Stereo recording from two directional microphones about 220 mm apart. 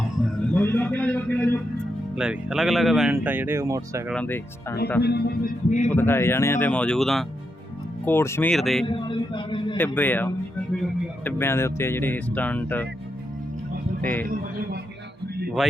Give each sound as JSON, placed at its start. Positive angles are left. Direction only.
{"t": 0.2, "sound": "a sound", "side_deg": 10}
{"t": 2.1, "sound": "speech", "side_deg": -5}
{"t": 4.1, "sound": "speech", "side_deg": 10}
{"t": 5.0, "sound": "speech", "side_deg": 45}
{"t": 5.9, "sound": "speech", "side_deg": 10}
{"t": 8.9, "sound": "speech", "side_deg": 20}
{"t": 9.7, "sound": "speech", "side_deg": 10}
{"t": 14.0, "sound": "speech", "side_deg": 10}